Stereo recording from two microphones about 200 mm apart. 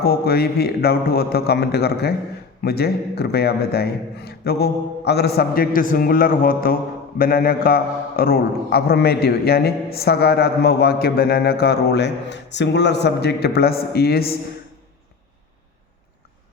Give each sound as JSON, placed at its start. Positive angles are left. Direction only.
{"t": 0.0, "sound": "a man's voice", "side_deg": 50}